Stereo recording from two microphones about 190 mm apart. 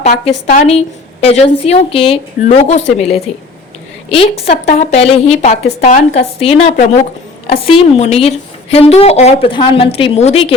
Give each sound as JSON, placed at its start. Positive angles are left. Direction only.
{"t": 0.3, "sound": "a woman's voice", "side_deg": 35}